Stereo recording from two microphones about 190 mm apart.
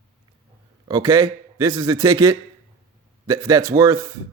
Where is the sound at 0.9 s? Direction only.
20° right (ahead or behind).